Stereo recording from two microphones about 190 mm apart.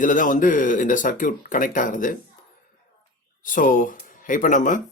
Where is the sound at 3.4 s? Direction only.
45° left (ahead or behind).